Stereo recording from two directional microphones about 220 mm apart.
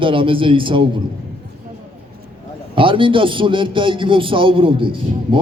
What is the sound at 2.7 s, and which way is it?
A man's voice, 25° right (ahead or behind).